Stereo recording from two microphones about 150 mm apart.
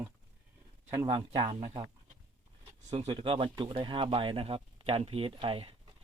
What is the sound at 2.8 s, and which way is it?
Speech, 35° right (ahead or behind).